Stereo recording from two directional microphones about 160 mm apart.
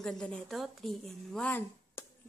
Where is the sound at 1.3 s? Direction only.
10° left (ahead or behind).